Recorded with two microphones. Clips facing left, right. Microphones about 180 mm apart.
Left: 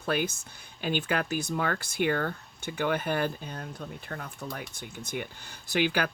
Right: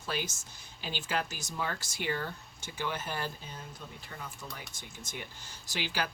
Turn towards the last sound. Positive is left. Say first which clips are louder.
# left 8 dB
turn(degrees=55)  # may be behind; listen again after turning